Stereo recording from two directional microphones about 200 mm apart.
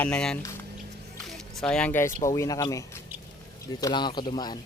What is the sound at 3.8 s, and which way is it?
Speech, 20° left (ahead or behind).